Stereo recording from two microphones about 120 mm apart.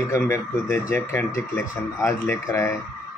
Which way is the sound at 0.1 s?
25° left (ahead or behind).